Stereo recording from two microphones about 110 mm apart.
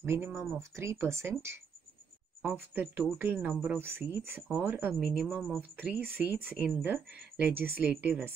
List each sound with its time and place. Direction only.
0.0 s speech: 20° right (ahead or behind)
0.3 s a woman's voice: centre (ahead or behind)
0.6 s speech: 25° right (ahead or behind); by 3.8 s 10° right (ahead or behind)
3.8 s speech: 20° right (ahead or behind)
4.9 s a woman's voice: 5° right (ahead or behind)
5.6 s speech: 15° right (ahead or behind)